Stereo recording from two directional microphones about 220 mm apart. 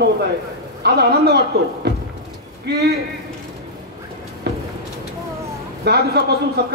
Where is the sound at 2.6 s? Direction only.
45° right (ahead or behind).